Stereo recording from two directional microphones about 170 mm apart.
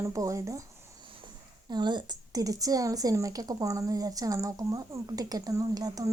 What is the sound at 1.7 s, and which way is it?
A woman's voice, 25° right (ahead or behind).